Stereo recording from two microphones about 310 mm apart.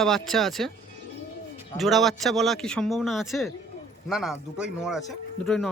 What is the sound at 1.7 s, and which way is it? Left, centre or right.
Speech, centre.